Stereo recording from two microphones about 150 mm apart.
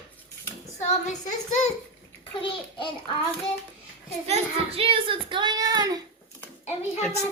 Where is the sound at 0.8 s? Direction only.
50° left (ahead or behind).